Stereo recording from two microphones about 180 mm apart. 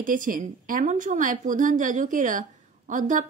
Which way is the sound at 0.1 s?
50° right (ahead or behind).